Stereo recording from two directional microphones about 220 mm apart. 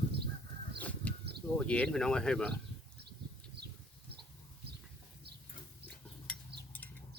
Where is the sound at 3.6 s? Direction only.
50° right (ahead or behind).